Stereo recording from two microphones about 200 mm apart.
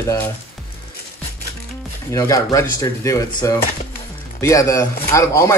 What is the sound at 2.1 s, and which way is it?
Speech, 15° left (ahead or behind).